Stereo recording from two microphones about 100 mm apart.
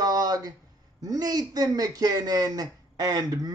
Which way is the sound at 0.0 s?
40° right (ahead or behind).